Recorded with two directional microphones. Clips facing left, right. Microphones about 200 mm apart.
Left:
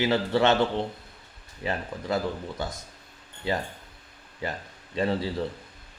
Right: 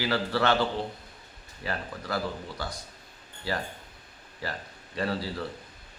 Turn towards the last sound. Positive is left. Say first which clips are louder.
# left 4 dB
turn(degrees=20)  # may be behind; listen again after turning